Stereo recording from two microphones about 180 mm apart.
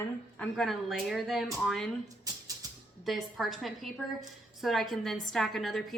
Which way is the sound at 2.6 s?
20° right (ahead or behind).